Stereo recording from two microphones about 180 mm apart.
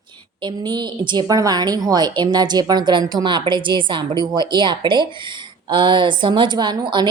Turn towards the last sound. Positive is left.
turn(degrees=-25)  # may be behind; listen again after turning